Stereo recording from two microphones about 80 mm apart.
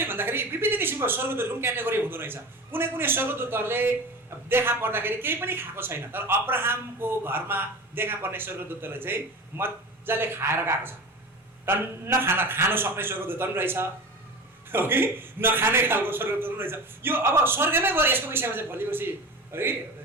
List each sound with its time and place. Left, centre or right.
0.0 s a man's voice: right